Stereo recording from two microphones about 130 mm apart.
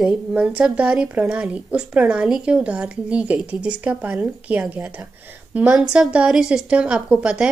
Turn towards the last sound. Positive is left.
turn(degrees=-10)  # may be behind; listen again after turning